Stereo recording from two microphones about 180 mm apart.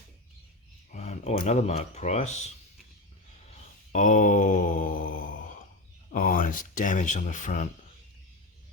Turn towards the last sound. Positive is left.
turn(degrees=45)  # may be behind; listen again after turning